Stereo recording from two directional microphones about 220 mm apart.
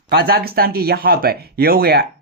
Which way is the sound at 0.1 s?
45° right (ahead or behind).